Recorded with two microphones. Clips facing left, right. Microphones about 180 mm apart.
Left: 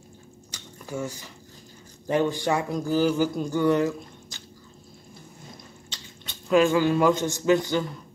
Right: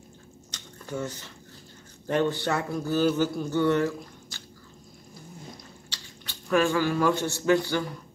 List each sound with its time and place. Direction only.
0.5 s a sound: 10° left (ahead or behind)
2.0 s speech: 15° left (ahead or behind)
5.9 s speech: 20° left (ahead or behind)